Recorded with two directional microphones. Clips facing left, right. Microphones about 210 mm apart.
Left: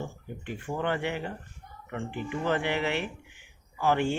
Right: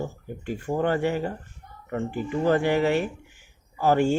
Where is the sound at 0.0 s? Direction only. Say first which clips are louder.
Right 5 dB; 40° right (ahead or behind).